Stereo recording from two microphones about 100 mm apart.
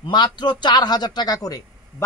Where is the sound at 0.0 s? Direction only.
45° left (ahead or behind).